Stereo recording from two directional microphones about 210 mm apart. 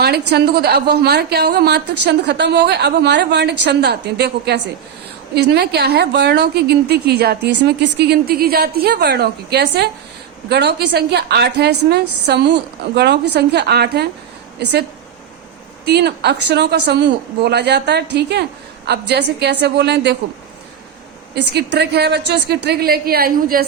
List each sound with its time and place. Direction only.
0.0 s a woman's voice: 50° right (ahead or behind)
15.9 s a woman's voice: 50° right (ahead or behind)
21.5 s a woman's voice: 50° right (ahead or behind)